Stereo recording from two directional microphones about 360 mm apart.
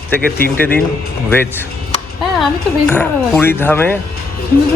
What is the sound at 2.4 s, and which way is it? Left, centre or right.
Speech, centre.